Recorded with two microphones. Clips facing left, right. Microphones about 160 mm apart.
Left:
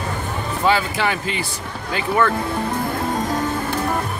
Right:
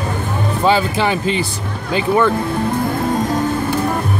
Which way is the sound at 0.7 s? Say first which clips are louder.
Right 3 dB; 25° right (ahead or behind).